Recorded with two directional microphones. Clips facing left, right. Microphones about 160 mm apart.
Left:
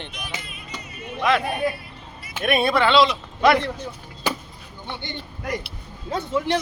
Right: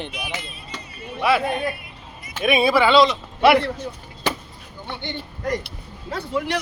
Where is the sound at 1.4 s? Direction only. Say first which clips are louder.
Right 3 dB; 20° right (ahead or behind).